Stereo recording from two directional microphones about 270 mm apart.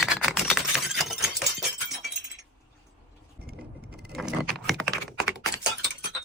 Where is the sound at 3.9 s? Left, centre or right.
Right.